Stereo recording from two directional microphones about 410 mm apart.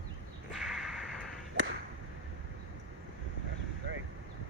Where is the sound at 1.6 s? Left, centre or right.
Right.